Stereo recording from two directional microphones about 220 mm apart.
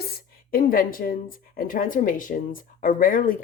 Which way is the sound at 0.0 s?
45° left (ahead or behind).